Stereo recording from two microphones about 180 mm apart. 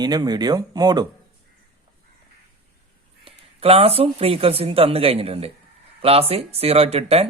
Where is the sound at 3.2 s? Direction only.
35° right (ahead or behind).